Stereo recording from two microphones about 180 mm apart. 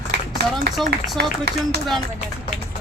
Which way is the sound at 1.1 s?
65° right (ahead or behind).